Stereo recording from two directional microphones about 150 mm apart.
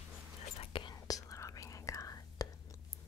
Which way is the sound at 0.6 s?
35° left (ahead or behind).